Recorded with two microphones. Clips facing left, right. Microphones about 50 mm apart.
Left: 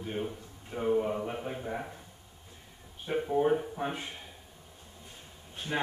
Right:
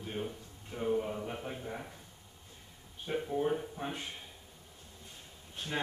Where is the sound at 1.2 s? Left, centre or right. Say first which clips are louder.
Left 4 dB; centre.